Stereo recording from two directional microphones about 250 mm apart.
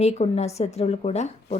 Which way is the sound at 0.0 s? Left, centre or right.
Left.